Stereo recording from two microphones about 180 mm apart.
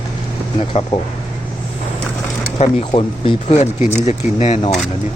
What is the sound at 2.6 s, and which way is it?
Speech, 30° left (ahead or behind).